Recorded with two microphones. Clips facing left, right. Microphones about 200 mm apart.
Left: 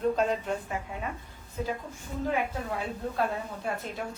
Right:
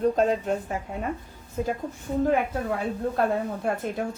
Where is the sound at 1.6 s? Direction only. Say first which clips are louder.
Right 5 dB; 45° right (ahead or behind).